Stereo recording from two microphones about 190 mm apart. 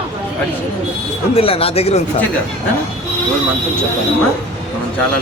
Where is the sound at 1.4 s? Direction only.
30° left (ahead or behind).